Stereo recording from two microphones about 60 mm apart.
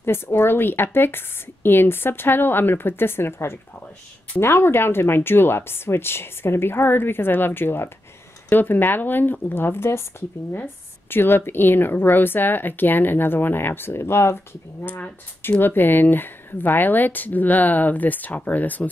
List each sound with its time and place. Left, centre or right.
0.0 s a woman's voice: left